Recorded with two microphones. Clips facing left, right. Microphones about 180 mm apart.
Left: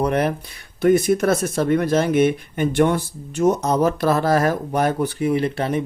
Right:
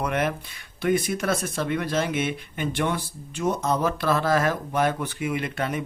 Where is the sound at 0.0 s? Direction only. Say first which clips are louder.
Left 6 dB; 35° left (ahead or behind).